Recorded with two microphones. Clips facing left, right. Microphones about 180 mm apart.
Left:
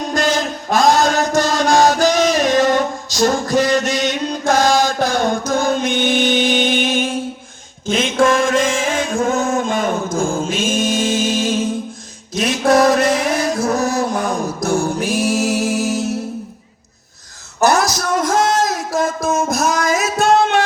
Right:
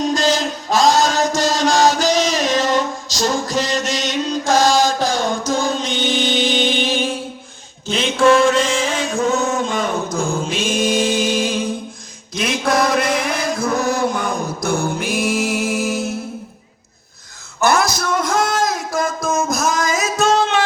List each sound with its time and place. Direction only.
0.0 s music: 55° left (ahead or behind)
7.9 s chant: 50° left (ahead or behind)
12.3 s music: 45° left (ahead or behind)
17.6 s a sound: 45° left (ahead or behind)
19.8 s music: 45° right (ahead or behind)